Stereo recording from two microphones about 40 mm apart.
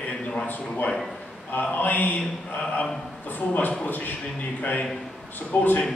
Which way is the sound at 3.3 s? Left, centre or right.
Left.